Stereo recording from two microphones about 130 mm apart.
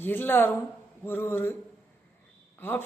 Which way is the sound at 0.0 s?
15° left (ahead or behind).